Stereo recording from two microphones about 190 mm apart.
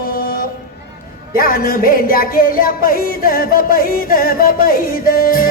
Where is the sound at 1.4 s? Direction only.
50° left (ahead or behind).